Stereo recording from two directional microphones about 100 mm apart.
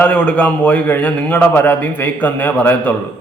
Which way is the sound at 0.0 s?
10° left (ahead or behind).